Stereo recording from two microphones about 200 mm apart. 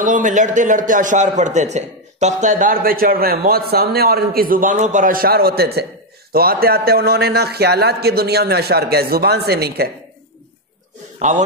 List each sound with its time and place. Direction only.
0.0 s a man's voice: 40° right (ahead or behind)
11.1 s a man's voice: 35° right (ahead or behind)